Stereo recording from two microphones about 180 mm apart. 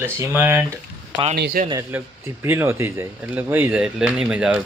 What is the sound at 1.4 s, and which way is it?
Speech, 65° right (ahead or behind).